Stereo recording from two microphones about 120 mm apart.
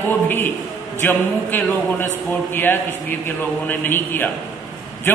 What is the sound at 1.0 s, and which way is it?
A man's voice, 15° left (ahead or behind).